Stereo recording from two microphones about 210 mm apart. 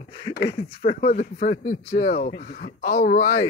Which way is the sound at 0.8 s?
35° left (ahead or behind).